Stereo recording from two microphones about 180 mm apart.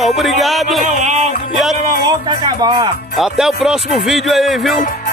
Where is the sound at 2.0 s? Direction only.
25° right (ahead or behind).